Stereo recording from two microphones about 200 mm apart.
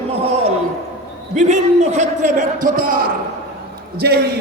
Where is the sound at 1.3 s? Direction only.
35° right (ahead or behind).